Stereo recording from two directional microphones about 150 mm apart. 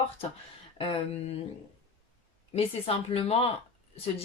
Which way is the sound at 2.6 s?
40° left (ahead or behind).